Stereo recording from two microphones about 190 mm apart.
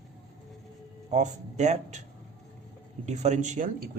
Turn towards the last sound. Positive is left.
turn(degrees=-40)  # may be behind; listen again after turning